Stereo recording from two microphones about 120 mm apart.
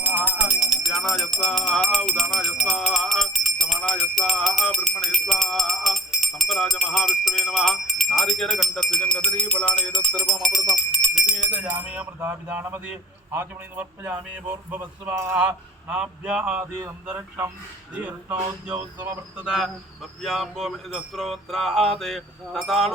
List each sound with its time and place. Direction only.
0.0 s music: 15° right (ahead or behind)
11.5 s music: 15° right (ahead or behind)
13.3 s speech: 15° right (ahead or behind)
19.5 s speech: centre (ahead or behind)